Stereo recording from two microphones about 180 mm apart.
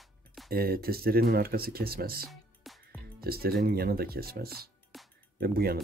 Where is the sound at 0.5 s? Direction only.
55° right (ahead or behind).